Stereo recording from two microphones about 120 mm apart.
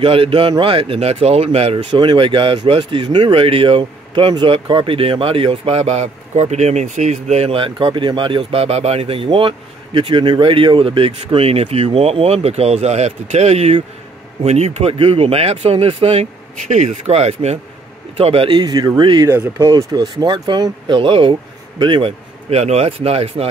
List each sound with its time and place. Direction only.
0.0 s speech: 50° right (ahead or behind)
1.9 s speech: 40° right (ahead or behind)
18.5 s speech: 35° right (ahead or behind)
19.3 s speech: 25° right (ahead or behind); by 22.1 s 40° right (ahead or behind)
22.5 s speech: 65° right (ahead or behind)